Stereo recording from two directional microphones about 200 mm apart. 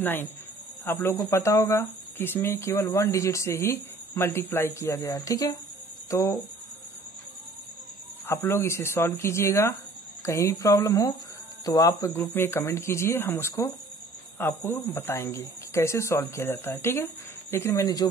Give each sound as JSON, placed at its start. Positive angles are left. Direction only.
{"t": 0.9, "sound": "speech", "side_deg": 10}
{"t": 8.3, "sound": "speech", "side_deg": 10}